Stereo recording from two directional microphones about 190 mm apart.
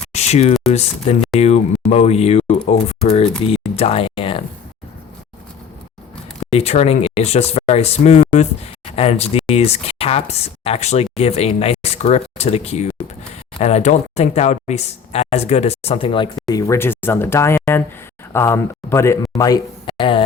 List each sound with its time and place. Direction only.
0.1 s a sound: 35° left (ahead or behind)
0.6 s speech: 35° left (ahead or behind)
6.5 s speech: 35° left (ahead or behind)